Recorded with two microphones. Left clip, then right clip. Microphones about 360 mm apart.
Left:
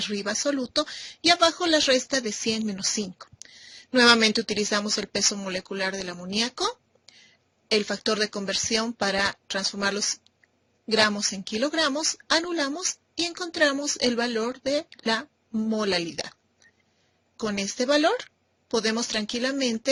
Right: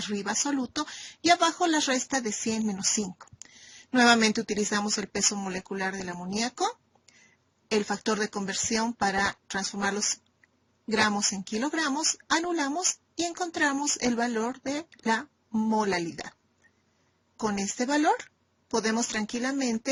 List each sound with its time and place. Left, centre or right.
0.0 s a woman's voice: centre